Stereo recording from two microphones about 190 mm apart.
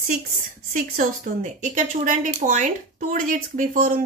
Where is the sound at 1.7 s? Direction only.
40° right (ahead or behind).